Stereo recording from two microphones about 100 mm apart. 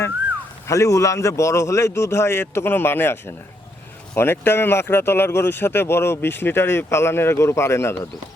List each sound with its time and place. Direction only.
0.7 s speech: 30° left (ahead or behind)